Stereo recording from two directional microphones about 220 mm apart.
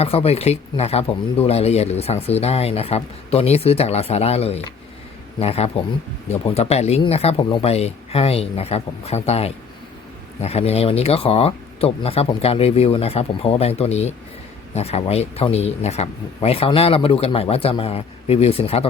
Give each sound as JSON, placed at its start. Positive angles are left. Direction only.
{"t": 0.0, "sound": "speech", "side_deg": 25}